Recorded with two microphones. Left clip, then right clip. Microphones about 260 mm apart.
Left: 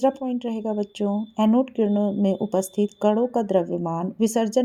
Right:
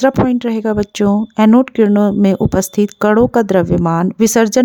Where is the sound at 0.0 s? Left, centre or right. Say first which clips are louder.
Right 10 dB; right.